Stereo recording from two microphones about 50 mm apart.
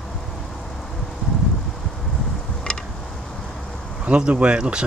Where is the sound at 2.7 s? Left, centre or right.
Centre.